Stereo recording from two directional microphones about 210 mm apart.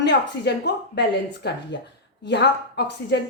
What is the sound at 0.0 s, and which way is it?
A woman's voice, 55° left (ahead or behind).